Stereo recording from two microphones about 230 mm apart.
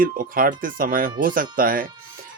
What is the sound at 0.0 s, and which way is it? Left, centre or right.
Speech, right.